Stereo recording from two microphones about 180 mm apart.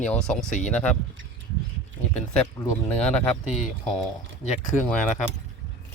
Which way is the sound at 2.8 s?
10° left (ahead or behind).